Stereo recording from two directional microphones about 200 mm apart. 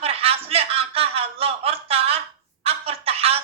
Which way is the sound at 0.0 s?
30° right (ahead or behind).